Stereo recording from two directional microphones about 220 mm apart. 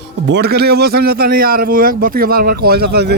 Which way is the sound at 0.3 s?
50° right (ahead or behind).